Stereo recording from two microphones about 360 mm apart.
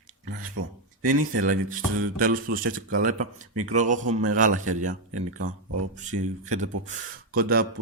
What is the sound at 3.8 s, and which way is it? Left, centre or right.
Speech, right.